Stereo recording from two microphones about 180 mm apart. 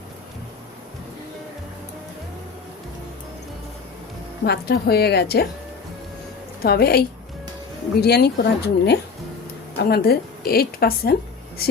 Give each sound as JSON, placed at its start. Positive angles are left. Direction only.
{"t": 4.4, "sound": "a woman's voice", "side_deg": 60}
{"t": 6.6, "sound": "a woman's voice", "side_deg": 60}
{"t": 8.0, "sound": "a woman's voice", "side_deg": 65}